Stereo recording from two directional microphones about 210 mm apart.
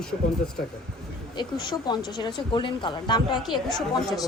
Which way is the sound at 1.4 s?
20° left (ahead or behind).